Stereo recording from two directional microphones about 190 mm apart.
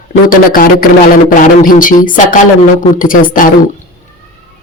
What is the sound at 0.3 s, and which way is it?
Speech, 45° left (ahead or behind).